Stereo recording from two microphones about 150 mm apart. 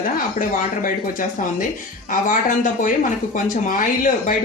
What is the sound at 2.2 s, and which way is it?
Speech, 60° left (ahead or behind).